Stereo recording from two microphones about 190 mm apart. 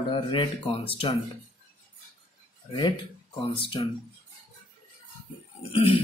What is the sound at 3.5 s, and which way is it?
Speech, 25° left (ahead or behind).